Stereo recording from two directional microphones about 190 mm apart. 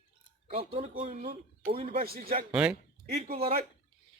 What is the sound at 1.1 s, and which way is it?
Speech, 45° right (ahead or behind).